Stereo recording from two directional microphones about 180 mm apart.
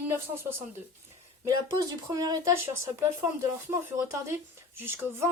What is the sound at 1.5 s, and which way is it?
A woman's voice, 20° right (ahead or behind).